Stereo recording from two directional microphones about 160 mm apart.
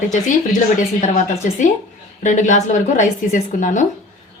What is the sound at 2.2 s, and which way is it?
Speech, 50° left (ahead or behind).